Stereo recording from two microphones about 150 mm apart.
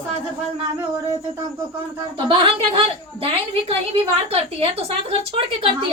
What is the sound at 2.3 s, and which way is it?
A woman's voice, 35° right (ahead or behind).